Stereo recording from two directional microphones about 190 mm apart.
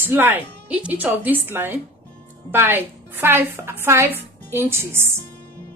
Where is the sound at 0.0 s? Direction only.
10° right (ahead or behind).